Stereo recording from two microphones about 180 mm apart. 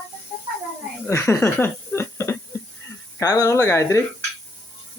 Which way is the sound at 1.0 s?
15° left (ahead or behind).